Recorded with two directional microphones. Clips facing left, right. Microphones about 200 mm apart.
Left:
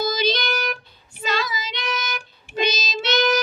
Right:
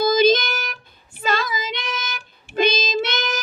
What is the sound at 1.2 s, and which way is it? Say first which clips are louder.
Female singing: right 2 dB; 50° right (ahead or behind).